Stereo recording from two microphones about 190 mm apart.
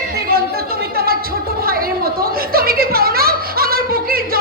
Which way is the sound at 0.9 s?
55° right (ahead or behind).